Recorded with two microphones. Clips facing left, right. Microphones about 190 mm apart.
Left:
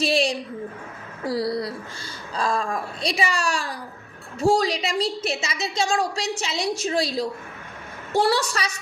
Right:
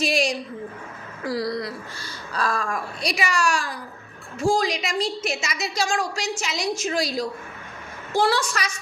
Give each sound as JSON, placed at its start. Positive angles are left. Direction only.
{"t": 0.0, "sound": "a woman's voice", "side_deg": 30}